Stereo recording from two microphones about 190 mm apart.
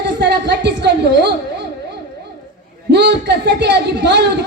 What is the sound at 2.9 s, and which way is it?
Speech, 60° right (ahead or behind).